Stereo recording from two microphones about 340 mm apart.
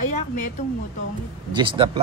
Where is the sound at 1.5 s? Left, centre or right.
Centre.